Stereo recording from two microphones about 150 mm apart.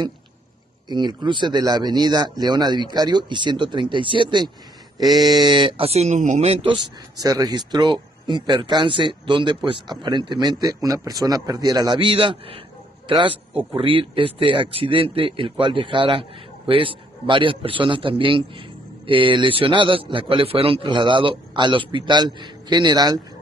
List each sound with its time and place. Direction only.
0.8 s speech: 30° right (ahead or behind)
13.5 s speech: 5° right (ahead or behind)
13.7 s speech: 35° right (ahead or behind)